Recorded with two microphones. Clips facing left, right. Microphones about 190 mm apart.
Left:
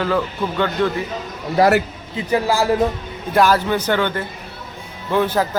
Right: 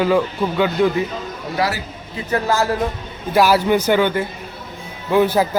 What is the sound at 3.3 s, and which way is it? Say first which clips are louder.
Speech: right 2 dB; 10° right (ahead or behind).